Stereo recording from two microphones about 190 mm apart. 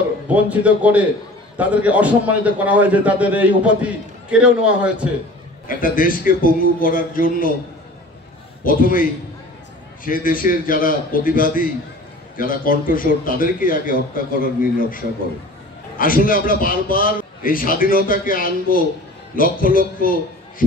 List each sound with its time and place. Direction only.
0.3 s a man's voice: 10° right (ahead or behind)
5.7 s a man's voice: 45° left (ahead or behind)
8.6 s a man's voice: 45° left (ahead or behind)
10.0 s a man's voice: 45° left (ahead or behind)